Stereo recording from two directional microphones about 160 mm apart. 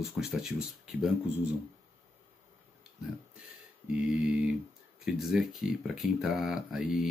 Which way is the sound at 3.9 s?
5° right (ahead or behind).